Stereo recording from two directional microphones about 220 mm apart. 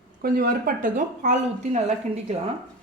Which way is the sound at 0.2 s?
40° right (ahead or behind).